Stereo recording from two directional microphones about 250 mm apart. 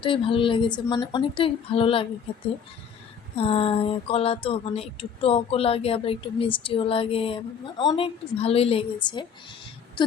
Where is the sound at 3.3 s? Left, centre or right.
Left.